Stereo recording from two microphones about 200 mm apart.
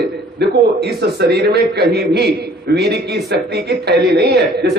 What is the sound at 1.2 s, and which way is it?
A man's voice, 55° right (ahead or behind).